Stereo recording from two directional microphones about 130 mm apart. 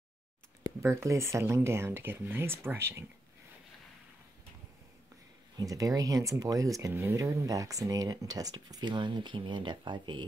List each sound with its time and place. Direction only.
0.8 s speech: 20° right (ahead or behind)
5.6 s speech: 25° right (ahead or behind)